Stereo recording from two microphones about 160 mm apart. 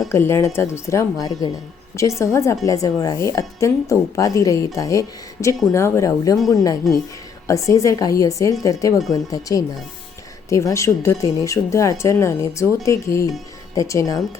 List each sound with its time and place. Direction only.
0.1 s a woman's voice: 15° left (ahead or behind)